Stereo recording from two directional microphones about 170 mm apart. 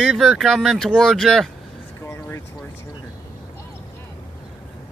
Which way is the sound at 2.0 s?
15° left (ahead or behind).